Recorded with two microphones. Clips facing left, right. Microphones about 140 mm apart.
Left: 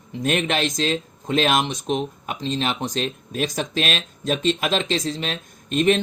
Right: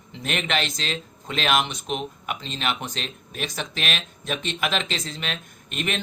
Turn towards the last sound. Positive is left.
turn(degrees=35)  # may be behind; listen again after turning